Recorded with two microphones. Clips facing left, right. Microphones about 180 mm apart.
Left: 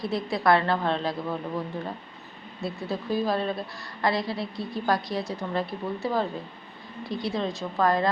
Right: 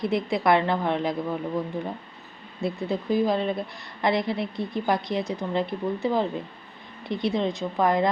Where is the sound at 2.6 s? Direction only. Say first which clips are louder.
Right 4 dB; 20° right (ahead or behind).